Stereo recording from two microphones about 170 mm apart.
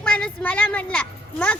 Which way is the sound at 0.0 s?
5° left (ahead or behind).